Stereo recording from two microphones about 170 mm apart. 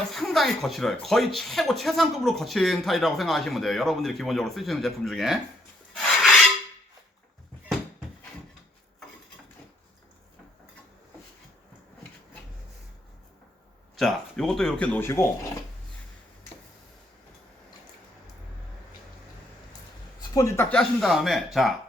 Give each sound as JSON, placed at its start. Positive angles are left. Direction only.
{"t": 0.1, "sound": "speech", "side_deg": 0}
{"t": 5.9, "sound": "filing", "side_deg": 5}
{"t": 13.9, "sound": "speech", "side_deg": 0}
{"t": 20.3, "sound": "speech", "side_deg": 20}
{"t": 20.7, "sound": "speech", "side_deg": 5}